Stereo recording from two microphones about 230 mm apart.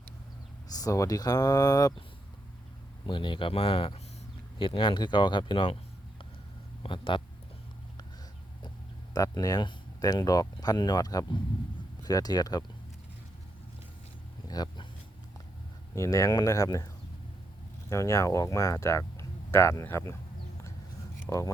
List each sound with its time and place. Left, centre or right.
0.7 s speech: centre
3.1 s speech: left
6.8 s speech: left
9.1 s speech: centre
14.4 s a sound: centre
16.0 s speech: centre
21.2 s speech: centre